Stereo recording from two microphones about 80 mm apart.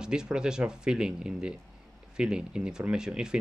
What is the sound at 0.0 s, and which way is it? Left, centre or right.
Speech, centre.